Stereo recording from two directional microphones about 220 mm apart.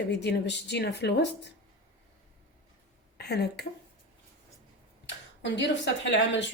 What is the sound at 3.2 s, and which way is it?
Speech, 45° left (ahead or behind).